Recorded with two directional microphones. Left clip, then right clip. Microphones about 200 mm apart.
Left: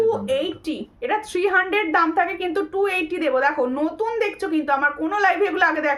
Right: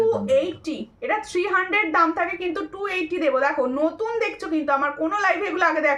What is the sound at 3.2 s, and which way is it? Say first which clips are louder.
Speech: even; 15° left (ahead or behind).